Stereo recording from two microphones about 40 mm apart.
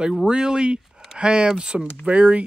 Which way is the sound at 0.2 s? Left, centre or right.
Centre.